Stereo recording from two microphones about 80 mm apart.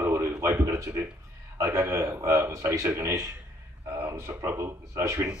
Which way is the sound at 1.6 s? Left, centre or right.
Right.